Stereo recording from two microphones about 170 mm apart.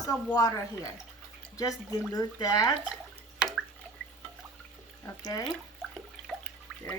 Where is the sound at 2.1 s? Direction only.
25° left (ahead or behind).